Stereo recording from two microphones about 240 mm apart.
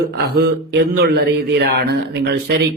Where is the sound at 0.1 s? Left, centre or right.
Right.